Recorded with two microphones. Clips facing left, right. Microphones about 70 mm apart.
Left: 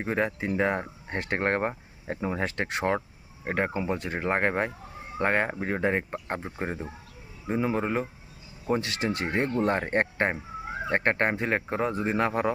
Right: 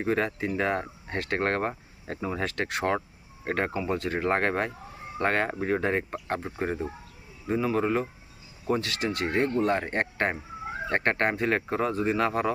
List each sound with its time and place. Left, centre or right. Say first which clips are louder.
0.0 s speech: right 1 dB; centre
3.4 s speech: even; centre